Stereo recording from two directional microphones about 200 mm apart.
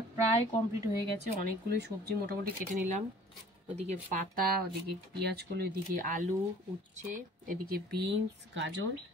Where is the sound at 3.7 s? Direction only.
35° right (ahead or behind).